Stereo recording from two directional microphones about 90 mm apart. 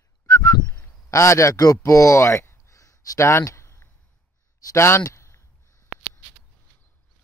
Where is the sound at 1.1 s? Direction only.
35° left (ahead or behind).